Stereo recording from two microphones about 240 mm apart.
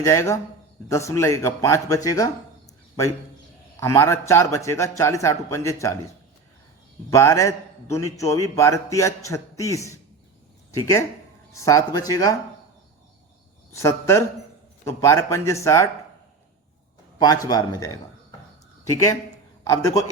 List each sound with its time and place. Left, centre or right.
0.0 s a man's voice: centre
3.8 s a man's voice: centre
7.1 s a man's voice: centre
13.7 s a man's voice: centre
17.2 s a man's voice: centre